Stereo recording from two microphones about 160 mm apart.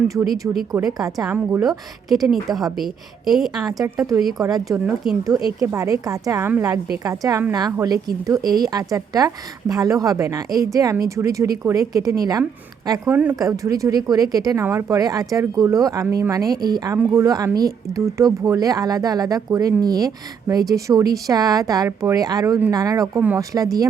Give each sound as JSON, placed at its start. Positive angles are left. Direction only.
{"t": 0.9, "sound": "speech", "side_deg": -25}
{"t": 1.6, "sound": "a woman's voice", "side_deg": 0}
{"t": 3.7, "sound": "speech", "side_deg": -20}
{"t": 13.1, "sound": "speech", "side_deg": -10}